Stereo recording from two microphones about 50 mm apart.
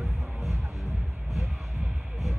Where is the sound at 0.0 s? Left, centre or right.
Centre.